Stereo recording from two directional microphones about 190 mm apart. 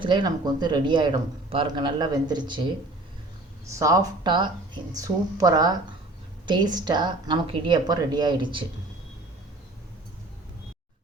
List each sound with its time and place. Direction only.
0.0 s speech: 25° right (ahead or behind)
3.7 s speech: 15° right (ahead or behind)